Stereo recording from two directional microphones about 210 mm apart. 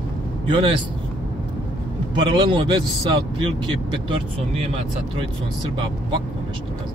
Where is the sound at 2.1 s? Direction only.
20° right (ahead or behind).